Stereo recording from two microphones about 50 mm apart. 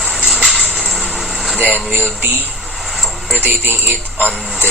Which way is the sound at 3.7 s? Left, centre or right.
Right.